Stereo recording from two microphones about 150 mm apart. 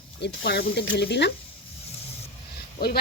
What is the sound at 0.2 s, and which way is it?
Speech, 90° left.